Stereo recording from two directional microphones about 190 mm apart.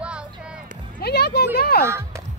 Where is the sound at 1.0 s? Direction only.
60° left (ahead or behind).